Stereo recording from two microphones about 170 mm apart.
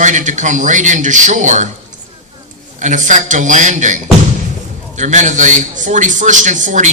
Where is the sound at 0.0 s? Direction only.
45° right (ahead or behind).